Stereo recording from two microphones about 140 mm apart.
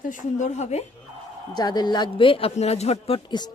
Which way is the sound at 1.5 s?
30° left (ahead or behind).